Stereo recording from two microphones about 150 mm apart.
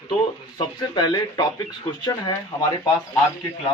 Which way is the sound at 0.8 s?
25° left (ahead or behind).